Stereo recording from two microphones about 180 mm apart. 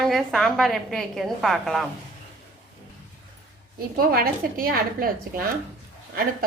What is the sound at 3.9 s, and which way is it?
A woman's voice, 55° right (ahead or behind).